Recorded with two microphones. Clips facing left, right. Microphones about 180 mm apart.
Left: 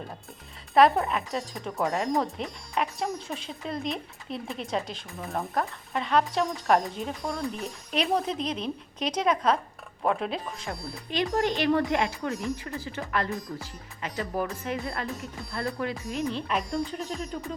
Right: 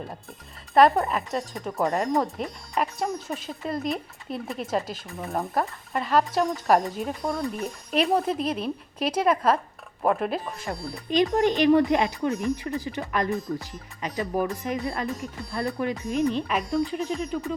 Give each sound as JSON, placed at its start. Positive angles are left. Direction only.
{"t": 0.7, "sound": "speech", "side_deg": 0}
{"t": 11.1, "sound": "speech", "side_deg": -15}